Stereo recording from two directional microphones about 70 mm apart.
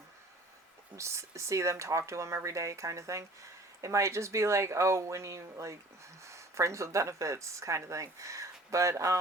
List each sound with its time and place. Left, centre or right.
0.9 s speech: right